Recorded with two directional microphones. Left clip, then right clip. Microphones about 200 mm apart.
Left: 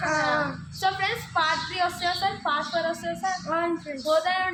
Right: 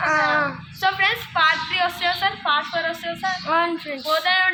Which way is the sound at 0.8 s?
25° left (ahead or behind).